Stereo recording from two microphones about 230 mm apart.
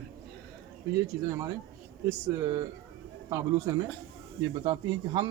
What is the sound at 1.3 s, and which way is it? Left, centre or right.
A man's voice, centre.